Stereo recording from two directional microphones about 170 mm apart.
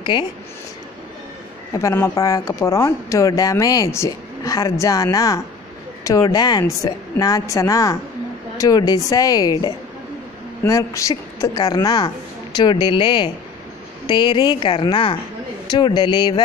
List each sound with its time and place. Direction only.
0.0 s speech: 25° left (ahead or behind)
1.7 s speech: 20° left (ahead or behind)